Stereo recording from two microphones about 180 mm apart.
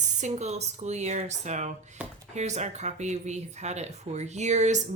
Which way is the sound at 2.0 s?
5° right (ahead or behind).